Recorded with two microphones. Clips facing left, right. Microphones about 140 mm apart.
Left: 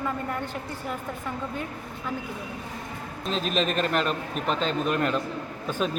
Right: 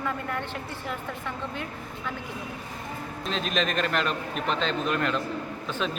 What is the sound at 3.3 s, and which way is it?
Speech, 40° left (ahead or behind).